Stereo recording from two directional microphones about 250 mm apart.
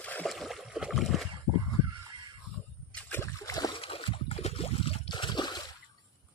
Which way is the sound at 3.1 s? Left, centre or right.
Centre.